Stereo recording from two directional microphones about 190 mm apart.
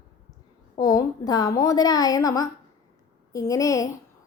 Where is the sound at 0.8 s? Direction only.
20° left (ahead or behind).